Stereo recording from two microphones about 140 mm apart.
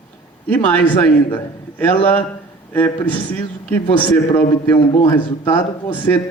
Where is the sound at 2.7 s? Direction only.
15° left (ahead or behind).